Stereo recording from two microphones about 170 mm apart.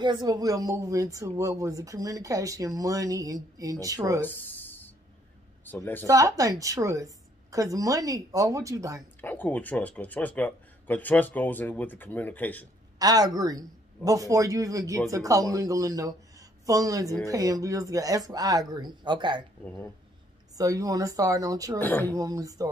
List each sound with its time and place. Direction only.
0.0 s speech: 25° right (ahead or behind)
4.2 s a sound: 10° left (ahead or behind)
5.7 s speech: 10° left (ahead or behind)
6.0 s speech: 20° right (ahead or behind)
9.2 s speech: 10° left (ahead or behind)
13.0 s speech: 20° right (ahead or behind)
20.5 s speech: 20° right (ahead or behind)
21.7 s speech: 10° left (ahead or behind)
22.1 s speech: 20° right (ahead or behind)